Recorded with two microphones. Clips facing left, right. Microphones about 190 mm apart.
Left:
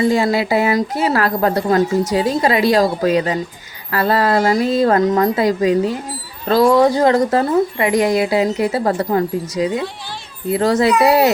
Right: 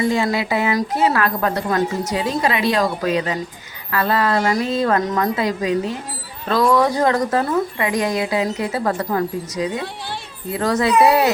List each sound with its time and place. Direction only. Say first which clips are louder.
0.0 s a woman's voice: left 4 dB; 30° left (ahead or behind)